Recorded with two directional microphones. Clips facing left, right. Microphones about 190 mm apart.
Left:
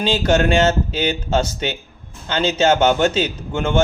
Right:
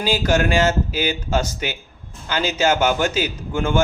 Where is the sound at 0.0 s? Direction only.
25° left (ahead or behind).